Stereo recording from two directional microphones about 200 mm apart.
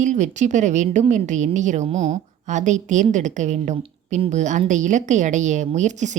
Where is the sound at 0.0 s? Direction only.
35° right (ahead or behind).